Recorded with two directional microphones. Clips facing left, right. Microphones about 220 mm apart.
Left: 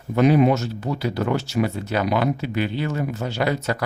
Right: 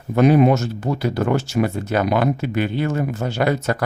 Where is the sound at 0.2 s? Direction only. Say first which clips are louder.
Right 2 dB; 50° right (ahead or behind).